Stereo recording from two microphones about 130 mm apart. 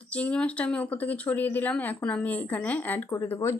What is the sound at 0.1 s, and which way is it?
Speech, 10° left (ahead or behind).